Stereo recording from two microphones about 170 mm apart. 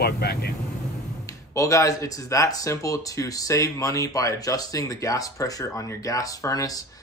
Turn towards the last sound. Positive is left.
turn(degrees=20)  # may be behind; listen again after turning